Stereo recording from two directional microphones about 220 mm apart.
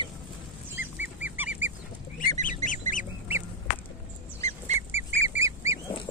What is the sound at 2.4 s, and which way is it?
Goose, 35° left (ahead or behind).